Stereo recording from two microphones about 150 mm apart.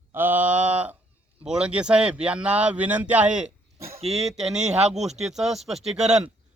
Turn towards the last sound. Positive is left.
turn(degrees=-5)  # may be behind; listen again after turning